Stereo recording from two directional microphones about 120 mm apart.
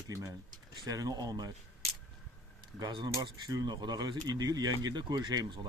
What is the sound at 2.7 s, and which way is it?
Speech, 35° right (ahead or behind).